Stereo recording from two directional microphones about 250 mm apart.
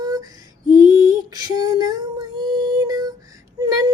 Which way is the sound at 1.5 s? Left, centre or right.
Centre.